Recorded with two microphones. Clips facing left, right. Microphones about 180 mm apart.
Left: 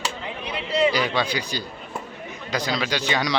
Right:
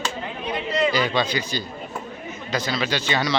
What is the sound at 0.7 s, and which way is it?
A man's voice, 10° left (ahead or behind).